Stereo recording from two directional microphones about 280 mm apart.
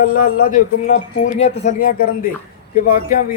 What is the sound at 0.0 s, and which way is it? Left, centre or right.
Speech, left.